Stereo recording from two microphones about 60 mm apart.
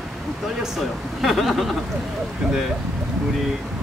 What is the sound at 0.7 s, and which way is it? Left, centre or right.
Speech, centre.